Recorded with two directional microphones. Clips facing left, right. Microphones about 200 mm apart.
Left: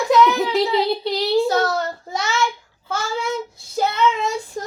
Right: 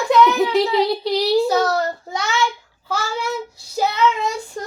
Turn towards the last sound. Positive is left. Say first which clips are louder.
# even
turn(degrees=0)  # may be behind; listen again after turning